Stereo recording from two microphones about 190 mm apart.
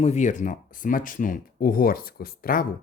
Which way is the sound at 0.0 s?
40° left (ahead or behind).